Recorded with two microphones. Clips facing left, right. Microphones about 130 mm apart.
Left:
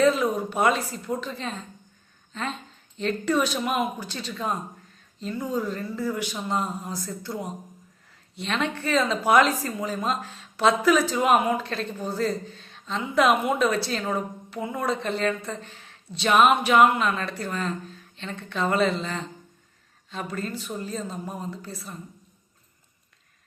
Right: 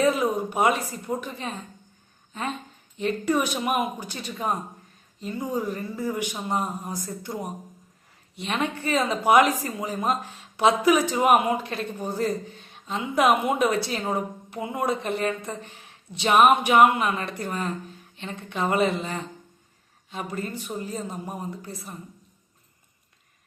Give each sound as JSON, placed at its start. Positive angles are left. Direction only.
{"t": 0.0, "sound": "speech", "side_deg": -15}